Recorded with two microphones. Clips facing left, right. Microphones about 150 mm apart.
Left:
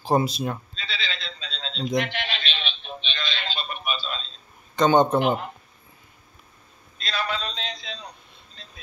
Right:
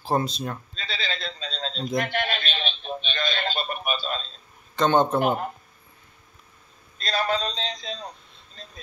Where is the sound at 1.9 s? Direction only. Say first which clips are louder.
Right 2 dB; 45° right (ahead or behind).